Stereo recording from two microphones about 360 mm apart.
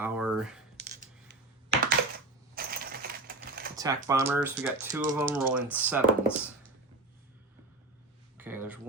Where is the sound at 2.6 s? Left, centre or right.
Right.